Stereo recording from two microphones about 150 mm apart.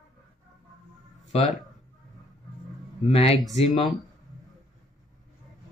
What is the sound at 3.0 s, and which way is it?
Speech, 40° left (ahead or behind).